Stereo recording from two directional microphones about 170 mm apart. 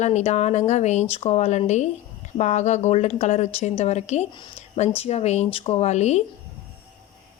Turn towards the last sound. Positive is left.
turn(degrees=40)  # may be behind; listen again after turning